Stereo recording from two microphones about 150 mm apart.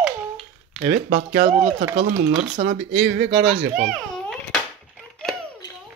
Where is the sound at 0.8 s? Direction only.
65° right (ahead or behind).